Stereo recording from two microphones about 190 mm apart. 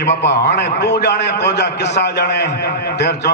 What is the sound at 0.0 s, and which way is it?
A man's voice, 65° left (ahead or behind).